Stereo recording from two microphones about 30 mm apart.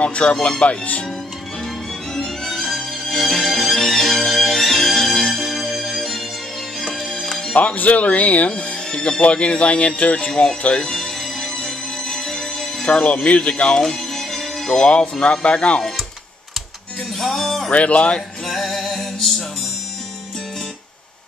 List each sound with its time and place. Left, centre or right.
0.0 s speech: left
2.1 s violin: centre
3.2 s music: centre
7.1 s music: left
7.9 s speech: left
10.9 s music: centre
12.8 s speech: left
13.7 s music: centre
14.7 s speech: left
17.2 s music: centre
17.6 s speech: left
18.5 s music: centre